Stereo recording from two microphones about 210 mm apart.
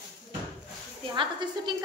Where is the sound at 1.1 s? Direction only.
20° right (ahead or behind).